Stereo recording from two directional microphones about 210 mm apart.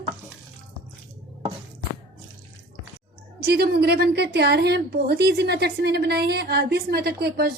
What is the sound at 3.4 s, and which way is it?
A woman's voice, 50° right (ahead or behind).